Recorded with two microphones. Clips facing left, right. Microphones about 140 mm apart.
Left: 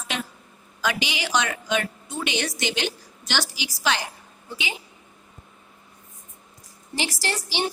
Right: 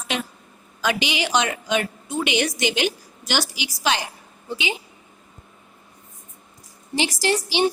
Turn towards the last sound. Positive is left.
turn(degrees=-15)  # may be behind; listen again after turning